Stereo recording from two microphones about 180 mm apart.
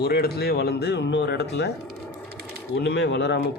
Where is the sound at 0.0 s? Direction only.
60° left (ahead or behind).